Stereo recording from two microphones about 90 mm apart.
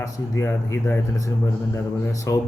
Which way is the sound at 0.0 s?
30° left (ahead or behind).